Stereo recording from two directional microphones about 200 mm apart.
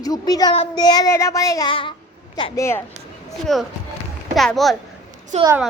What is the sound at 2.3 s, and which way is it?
Speech, 20° left (ahead or behind).